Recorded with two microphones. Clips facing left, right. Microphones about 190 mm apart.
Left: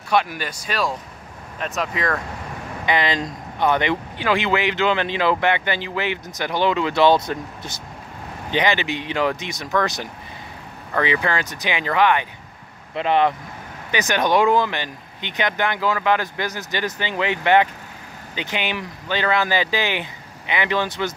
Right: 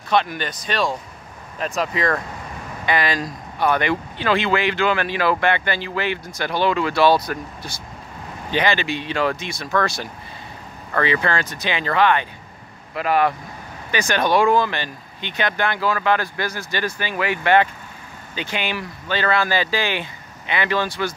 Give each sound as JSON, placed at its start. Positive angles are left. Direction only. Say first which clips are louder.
{"t": 0.1, "sound": "speech", "louder": "right 1 dB", "side_deg": 10}
{"t": 2.8, "sound": "speech", "louder": "even", "side_deg": 20}